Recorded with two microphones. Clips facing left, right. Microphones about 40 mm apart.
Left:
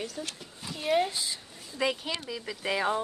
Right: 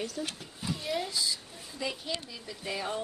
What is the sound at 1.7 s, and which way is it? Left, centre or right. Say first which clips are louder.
Speech: left 5 dB; left.